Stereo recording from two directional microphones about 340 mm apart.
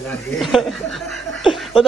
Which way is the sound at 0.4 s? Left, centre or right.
Centre.